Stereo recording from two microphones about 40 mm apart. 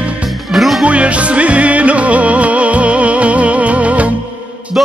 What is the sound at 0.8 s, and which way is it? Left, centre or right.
Music, right.